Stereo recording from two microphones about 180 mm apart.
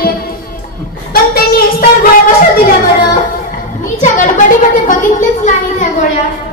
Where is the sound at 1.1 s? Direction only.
55° left (ahead or behind).